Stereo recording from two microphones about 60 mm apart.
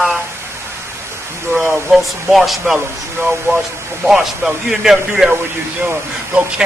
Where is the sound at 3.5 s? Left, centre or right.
Right.